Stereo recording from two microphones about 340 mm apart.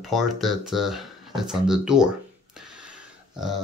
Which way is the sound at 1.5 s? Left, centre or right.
Centre.